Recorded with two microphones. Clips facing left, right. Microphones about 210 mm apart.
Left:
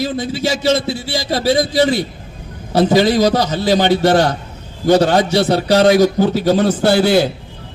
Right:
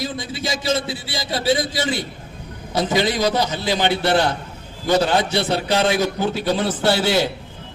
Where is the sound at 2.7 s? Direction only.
40° left (ahead or behind).